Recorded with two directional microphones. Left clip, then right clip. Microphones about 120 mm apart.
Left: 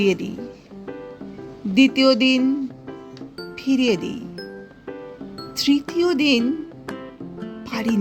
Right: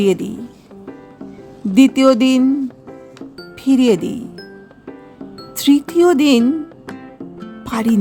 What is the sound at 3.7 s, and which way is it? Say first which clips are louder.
Music: right 6 dB; 35° right (ahead or behind).